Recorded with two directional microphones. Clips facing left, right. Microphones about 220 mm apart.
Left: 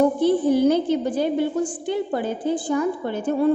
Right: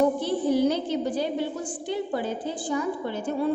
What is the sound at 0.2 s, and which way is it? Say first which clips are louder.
A woman's voice: left 5 dB; 55° left (ahead or behind).